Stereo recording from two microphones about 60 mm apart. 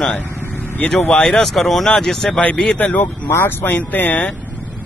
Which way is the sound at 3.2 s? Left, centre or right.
Left.